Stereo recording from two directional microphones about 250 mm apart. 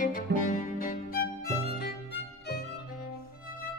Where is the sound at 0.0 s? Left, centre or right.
Left.